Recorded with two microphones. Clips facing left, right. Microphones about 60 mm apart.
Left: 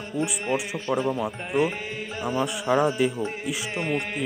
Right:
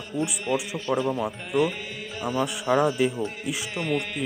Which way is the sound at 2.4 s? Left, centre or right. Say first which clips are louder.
Even; centre.